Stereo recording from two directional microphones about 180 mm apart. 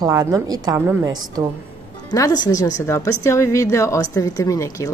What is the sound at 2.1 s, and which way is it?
Speech, 20° left (ahead or behind).